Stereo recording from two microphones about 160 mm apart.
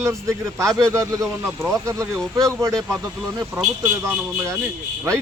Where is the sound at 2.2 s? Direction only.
5° left (ahead or behind).